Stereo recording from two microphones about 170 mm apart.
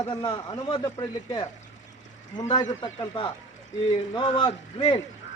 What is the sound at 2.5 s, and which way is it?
Speech, 25° left (ahead or behind).